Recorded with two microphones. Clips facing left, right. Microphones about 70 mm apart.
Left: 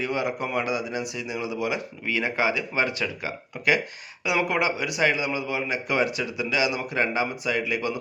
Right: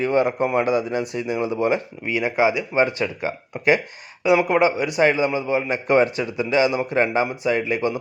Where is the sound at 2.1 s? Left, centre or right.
Centre.